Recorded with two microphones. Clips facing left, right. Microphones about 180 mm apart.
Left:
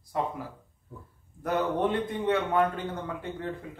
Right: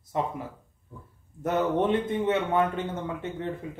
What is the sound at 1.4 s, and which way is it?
A man's voice, 25° right (ahead or behind).